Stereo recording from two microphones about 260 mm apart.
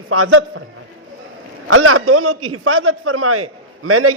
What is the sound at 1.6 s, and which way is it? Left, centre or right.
A man's voice, right.